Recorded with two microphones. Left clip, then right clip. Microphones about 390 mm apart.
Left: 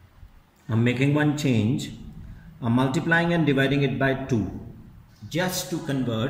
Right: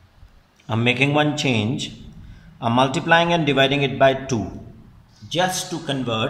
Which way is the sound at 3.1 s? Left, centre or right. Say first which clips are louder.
Right 5 dB; centre.